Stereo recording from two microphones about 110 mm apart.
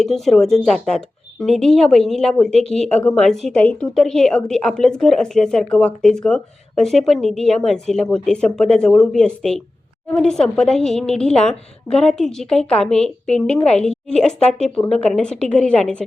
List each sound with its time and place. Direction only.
0.0 s a woman's voice: 5° left (ahead or behind)